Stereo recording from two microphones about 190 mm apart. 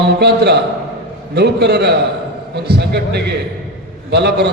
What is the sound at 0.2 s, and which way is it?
A man's voice, 60° right (ahead or behind).